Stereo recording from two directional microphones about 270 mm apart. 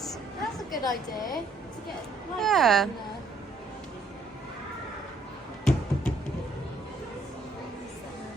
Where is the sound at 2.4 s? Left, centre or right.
Centre.